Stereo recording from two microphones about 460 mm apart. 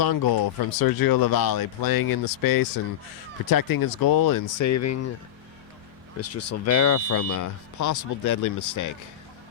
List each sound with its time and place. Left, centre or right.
0.0 s speech: left
6.1 s speech: left